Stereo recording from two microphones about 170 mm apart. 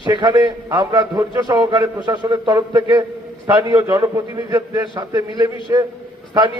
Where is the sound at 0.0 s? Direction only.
20° right (ahead or behind).